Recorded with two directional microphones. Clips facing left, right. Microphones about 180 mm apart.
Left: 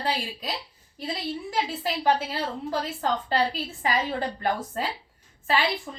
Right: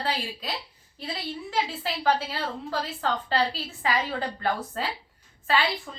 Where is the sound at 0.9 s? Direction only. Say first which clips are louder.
Left 3 dB; 10° left (ahead or behind).